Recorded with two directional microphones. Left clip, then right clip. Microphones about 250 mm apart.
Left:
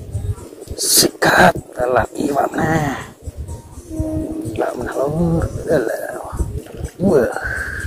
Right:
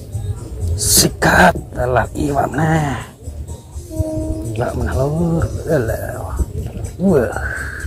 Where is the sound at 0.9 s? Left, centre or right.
Centre.